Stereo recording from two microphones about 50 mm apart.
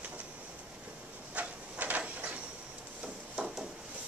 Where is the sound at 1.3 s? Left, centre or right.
Right.